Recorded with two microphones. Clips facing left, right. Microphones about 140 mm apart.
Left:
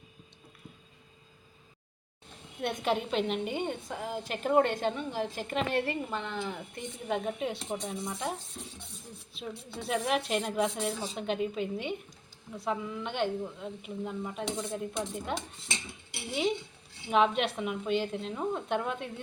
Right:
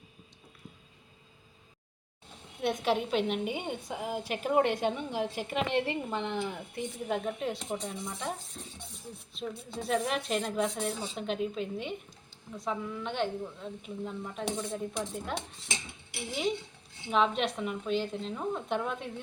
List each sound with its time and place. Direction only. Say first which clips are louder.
2.6 s a woman's voice: right 1 dB; centre (ahead or behind); by 6.5 s 20° right (ahead or behind)
6.7 s a woman's voice: right 1 dB; centre (ahead or behind)
9.3 s a woman's voice: right 2 dB; 5° left (ahead or behind)
17.1 s a woman's voice: left 2 dB; 5° left (ahead or behind)